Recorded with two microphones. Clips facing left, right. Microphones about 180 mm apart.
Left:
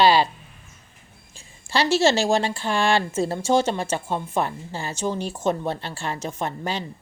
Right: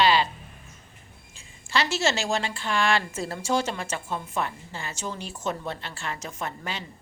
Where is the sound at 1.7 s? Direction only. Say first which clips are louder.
Left 6 dB; 30° left (ahead or behind).